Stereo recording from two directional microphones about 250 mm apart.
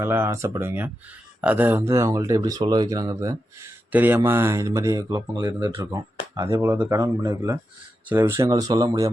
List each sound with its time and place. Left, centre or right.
0.0 s speech: centre